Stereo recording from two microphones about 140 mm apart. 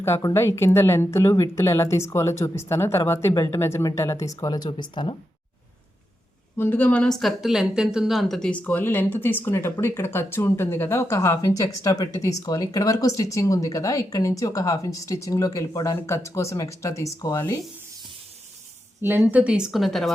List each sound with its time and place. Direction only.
0.0 s speech: 20° left (ahead or behind)
6.6 s speech: 15° left (ahead or behind)
19.0 s a woman's voice: 15° right (ahead or behind); by 20.1 s centre (ahead or behind)